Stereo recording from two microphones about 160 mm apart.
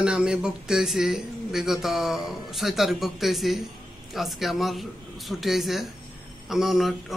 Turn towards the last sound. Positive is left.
turn(degrees=0)  # may be behind; listen again after turning